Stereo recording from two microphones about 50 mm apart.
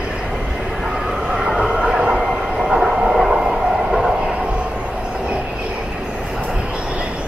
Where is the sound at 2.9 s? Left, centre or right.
Centre.